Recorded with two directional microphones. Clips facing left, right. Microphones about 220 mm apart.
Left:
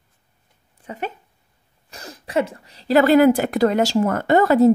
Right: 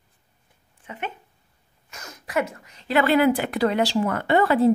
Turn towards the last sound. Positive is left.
turn(degrees=45)  # may be behind; listen again after turning